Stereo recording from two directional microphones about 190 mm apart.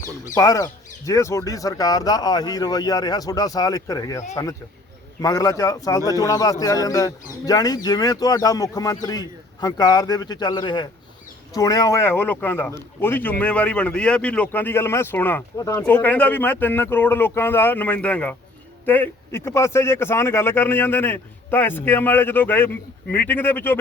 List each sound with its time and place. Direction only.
0.3 s speech: 20° left (ahead or behind)
5.2 s a man's voice: 15° left (ahead or behind)